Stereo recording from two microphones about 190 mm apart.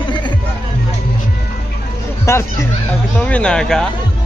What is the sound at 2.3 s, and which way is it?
Speech, 15° left (ahead or behind).